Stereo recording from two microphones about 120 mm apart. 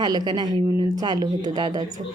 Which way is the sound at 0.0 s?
35° right (ahead or behind).